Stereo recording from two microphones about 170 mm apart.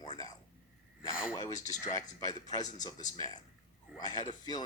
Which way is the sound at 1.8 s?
20° left (ahead or behind).